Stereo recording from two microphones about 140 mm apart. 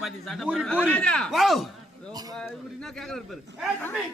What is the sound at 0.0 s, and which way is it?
Speech, centre (ahead or behind).